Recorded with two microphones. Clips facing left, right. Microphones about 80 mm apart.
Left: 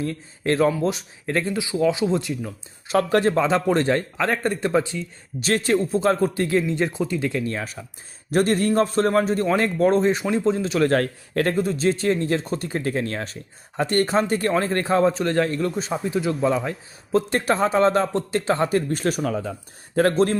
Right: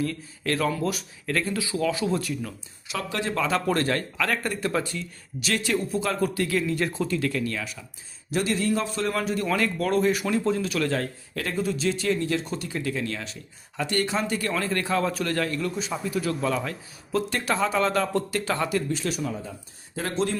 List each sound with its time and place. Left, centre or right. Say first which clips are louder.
0.0 s a man's voice: left 3 dB; left
2.8 s speech: left 11 dB; left
3.3 s a man's voice: left 5 dB; left
5.4 s a man's voice: left 5 dB; left
10.8 s a man's voice: left 7 dB; left
18.9 s speech: left 5 dB; left
19.2 s speech: left 6 dB; left
20.0 s speech: left 9 dB; left